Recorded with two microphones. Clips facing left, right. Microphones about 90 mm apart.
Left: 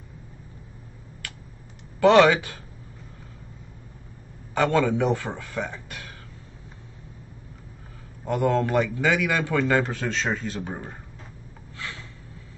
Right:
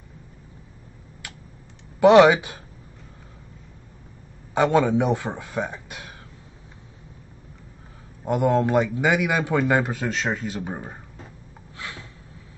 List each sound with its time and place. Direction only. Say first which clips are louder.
2.0 s a man's voice: right 3 dB; 15° right (ahead or behind)
4.6 s a man's voice: right 2 dB; 15° right (ahead or behind)
8.3 s a man's voice: right 2 dB; 15° right (ahead or behind)
11.7 s snort: even; 15° right (ahead or behind)